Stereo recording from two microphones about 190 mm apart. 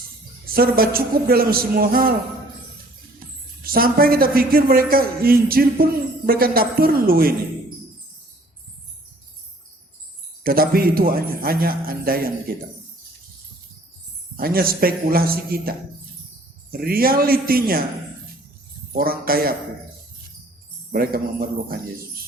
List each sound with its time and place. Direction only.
0.5 s a man's voice: 50° right (ahead or behind)
3.6 s a man's voice: 50° right (ahead or behind)
10.4 s a man's voice: 50° right (ahead or behind)
14.3 s a man's voice: 50° right (ahead or behind)
16.8 s a man's voice: 50° right (ahead or behind)
18.9 s a man's voice: 50° right (ahead or behind)
20.9 s a man's voice: 50° right (ahead or behind)